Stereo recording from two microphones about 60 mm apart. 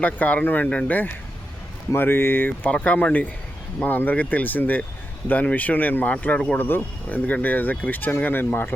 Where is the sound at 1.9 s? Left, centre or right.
Left.